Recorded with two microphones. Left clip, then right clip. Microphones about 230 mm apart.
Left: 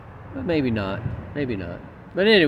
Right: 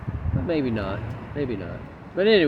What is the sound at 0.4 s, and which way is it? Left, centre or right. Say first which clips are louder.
Speech: left 2 dB; left.